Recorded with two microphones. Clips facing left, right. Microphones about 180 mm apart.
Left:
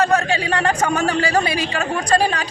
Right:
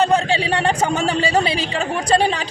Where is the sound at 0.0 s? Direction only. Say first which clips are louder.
Right 1 dB; 30° right (ahead or behind).